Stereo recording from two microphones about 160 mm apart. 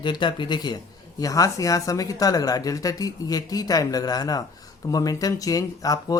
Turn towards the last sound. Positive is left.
turn(degrees=20)  # may be behind; listen again after turning